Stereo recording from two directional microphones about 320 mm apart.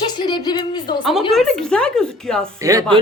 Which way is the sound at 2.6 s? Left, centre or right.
Centre.